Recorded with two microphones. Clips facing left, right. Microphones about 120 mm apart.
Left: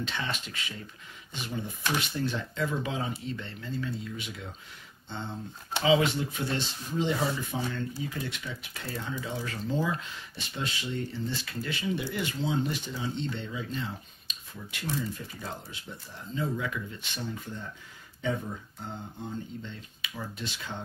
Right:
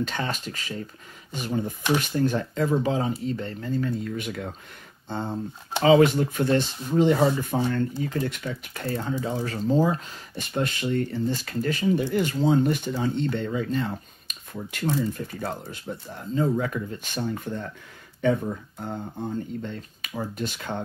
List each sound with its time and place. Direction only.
0.0 s speech: 45° right (ahead or behind)
5.1 s speech: 40° right (ahead or behind)